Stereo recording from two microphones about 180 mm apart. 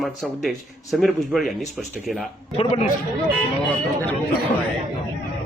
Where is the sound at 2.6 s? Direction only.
35° left (ahead or behind).